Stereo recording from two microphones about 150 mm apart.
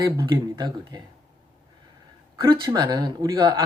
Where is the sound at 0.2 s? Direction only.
25° right (ahead or behind).